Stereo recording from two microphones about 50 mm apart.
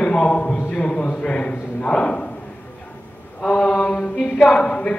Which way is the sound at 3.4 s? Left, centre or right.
Centre.